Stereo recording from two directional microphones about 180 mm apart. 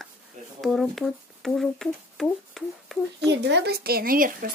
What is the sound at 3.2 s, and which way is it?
Speech, 75° right (ahead or behind).